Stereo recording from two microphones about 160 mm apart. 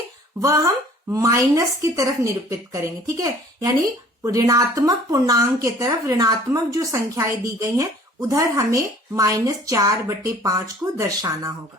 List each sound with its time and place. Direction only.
0.4 s a woman's voice: 20° right (ahead or behind)